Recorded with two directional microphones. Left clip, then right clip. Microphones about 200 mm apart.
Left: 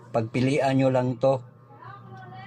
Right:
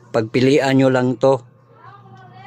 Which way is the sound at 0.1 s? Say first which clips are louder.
Right 10 dB; 35° right (ahead or behind).